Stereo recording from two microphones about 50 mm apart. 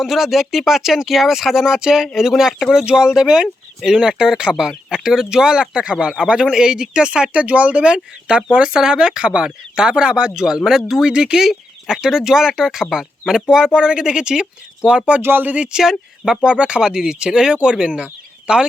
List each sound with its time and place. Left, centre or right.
0.0 s speech: centre; by 15.2 s right
15.2 s speech: right
15.5 s speech: centre
16.4 s speech: centre